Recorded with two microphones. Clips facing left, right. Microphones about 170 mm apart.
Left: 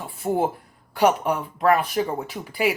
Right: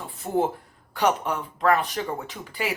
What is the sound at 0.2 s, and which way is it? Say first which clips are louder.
Speech: left 2 dB; 20° left (ahead or behind).